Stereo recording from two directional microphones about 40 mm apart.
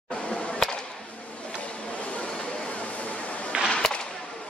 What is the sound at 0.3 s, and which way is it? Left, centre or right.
Whip, left.